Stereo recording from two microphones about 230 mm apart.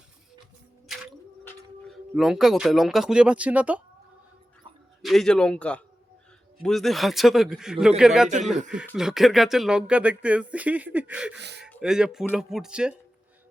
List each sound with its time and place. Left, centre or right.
1.5 s speech: centre
5.0 s speech: centre
11.3 s speech: right
11.8 s speech: centre